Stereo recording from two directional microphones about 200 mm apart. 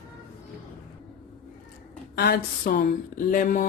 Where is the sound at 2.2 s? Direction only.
50° left (ahead or behind).